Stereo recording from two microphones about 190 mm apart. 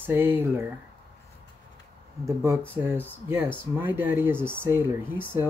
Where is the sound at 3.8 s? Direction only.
10° right (ahead or behind).